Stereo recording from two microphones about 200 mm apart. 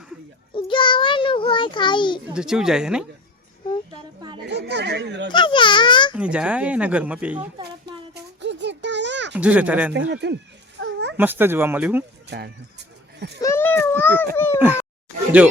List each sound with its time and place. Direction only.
0.5 s child singing: 25° left (ahead or behind)
2.3 s speech: 5° right (ahead or behind)
3.9 s a sound: 25° right (ahead or behind)
4.4 s speech: 60° right (ahead or behind)
5.3 s speech: 25° left (ahead or behind)
6.1 s speech: 5° right (ahead or behind)
8.1 s a sound: 60° right (ahead or behind)
9.3 s speech: 5° right (ahead or behind)
10.1 s speech: 60° right (ahead or behind)
10.8 s a sound: 60° right (ahead or behind)
11.2 s speech: 10° right (ahead or behind)
13.1 s speech: 55° right (ahead or behind)
13.4 s a child's voice: 10° left (ahead or behind)
15.4 s speech: 5° right (ahead or behind)